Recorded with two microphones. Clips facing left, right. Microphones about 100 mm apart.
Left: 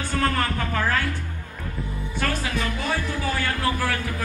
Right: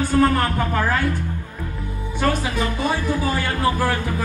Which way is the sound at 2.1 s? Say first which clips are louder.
Right 5 dB; 20° right (ahead or behind).